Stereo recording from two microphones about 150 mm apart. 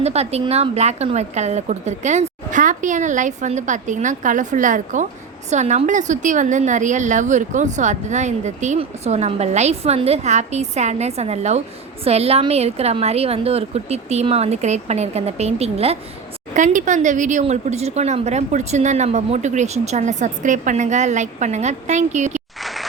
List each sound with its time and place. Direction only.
0.0 s a woman's voice: 45° right (ahead or behind)
16.6 s a woman's voice: 55° right (ahead or behind)
22.6 s a sound: centre (ahead or behind)